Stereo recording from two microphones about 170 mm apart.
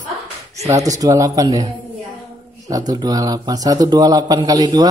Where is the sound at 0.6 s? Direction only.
20° right (ahead or behind).